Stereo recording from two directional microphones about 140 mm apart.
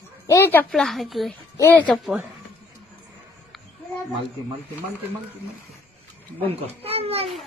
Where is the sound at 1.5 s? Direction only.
20° left (ahead or behind).